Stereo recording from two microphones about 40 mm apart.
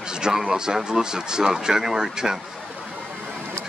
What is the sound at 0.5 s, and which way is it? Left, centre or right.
Speech, centre.